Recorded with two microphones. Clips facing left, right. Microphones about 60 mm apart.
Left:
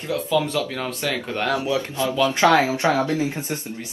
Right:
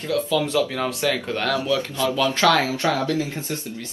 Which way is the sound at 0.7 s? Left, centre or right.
Centre.